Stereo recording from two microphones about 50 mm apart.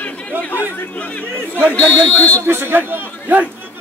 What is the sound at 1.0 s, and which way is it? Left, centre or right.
Speech, left.